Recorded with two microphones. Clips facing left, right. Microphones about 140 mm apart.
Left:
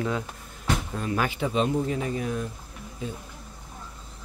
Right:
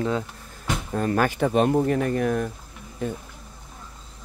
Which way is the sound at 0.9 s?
50° right (ahead or behind).